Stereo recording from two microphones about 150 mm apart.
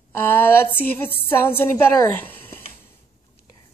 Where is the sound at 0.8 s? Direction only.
15° left (ahead or behind).